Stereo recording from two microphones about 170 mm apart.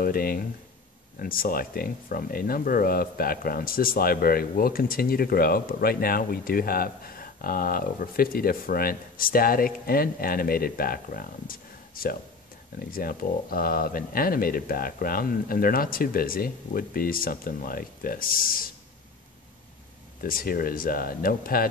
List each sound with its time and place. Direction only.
0.0 s speech: 60° left (ahead or behind)
20.2 s speech: 60° left (ahead or behind)